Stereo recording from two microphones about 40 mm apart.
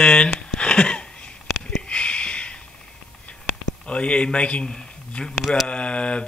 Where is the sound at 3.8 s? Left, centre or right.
Left.